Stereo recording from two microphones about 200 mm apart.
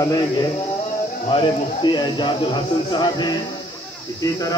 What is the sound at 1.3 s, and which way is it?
Speech, 25° left (ahead or behind).